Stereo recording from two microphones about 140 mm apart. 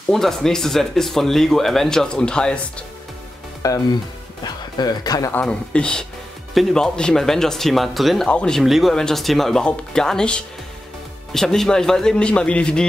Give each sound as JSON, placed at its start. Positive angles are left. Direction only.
{"t": 0.1, "sound": "speech", "side_deg": 5}
{"t": 3.6, "sound": "speech", "side_deg": 25}
{"t": 5.3, "sound": "speech", "side_deg": 10}